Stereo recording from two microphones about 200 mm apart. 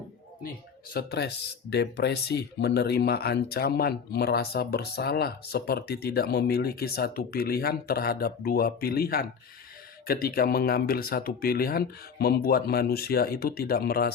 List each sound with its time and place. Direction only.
0.9 s speech: 55° left (ahead or behind)